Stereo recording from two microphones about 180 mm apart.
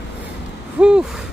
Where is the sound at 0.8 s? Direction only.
5° right (ahead or behind).